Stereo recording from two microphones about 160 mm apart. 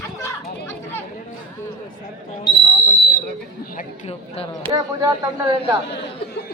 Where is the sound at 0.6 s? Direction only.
15° left (ahead or behind).